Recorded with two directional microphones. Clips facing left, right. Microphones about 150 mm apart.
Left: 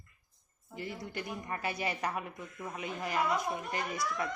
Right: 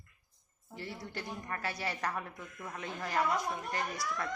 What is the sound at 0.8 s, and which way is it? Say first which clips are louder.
A woman's voice: left 2 dB; 20° left (ahead or behind).